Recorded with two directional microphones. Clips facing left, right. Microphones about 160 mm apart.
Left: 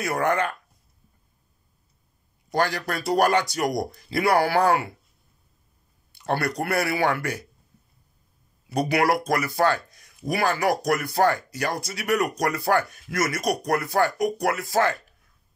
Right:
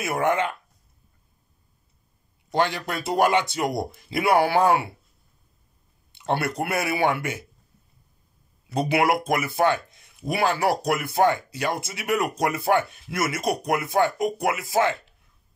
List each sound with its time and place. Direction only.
0.0 s speech: 20° right (ahead or behind)
2.5 s speech: 20° right (ahead or behind)
6.1 s speech: 25° right (ahead or behind)
8.7 s speech: 25° right (ahead or behind)